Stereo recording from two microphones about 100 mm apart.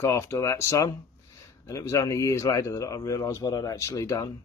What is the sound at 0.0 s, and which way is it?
Speech, 30° left (ahead or behind).